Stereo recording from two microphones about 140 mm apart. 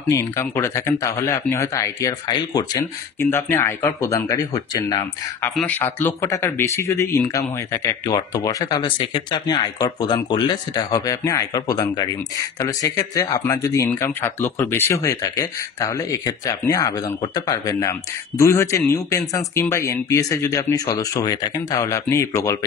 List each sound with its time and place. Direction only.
0.1 s speech: 20° left (ahead or behind)
3.2 s speech: 15° left (ahead or behind)
5.7 s speech: 15° left (ahead or behind)